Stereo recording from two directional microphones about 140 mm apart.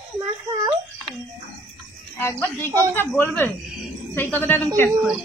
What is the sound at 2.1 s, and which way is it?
Speech, 15° left (ahead or behind).